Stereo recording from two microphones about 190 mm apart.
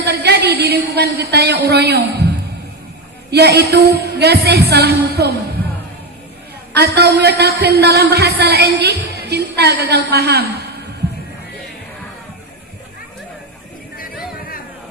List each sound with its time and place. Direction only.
0.1 s a woman's voice: 60° right (ahead or behind)
3.3 s a man's voice: 60° right (ahead or behind)
6.7 s a man's voice: 60° right (ahead or behind)